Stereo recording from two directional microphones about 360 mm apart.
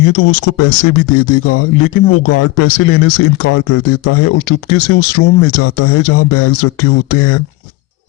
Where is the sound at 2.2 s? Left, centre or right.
Left.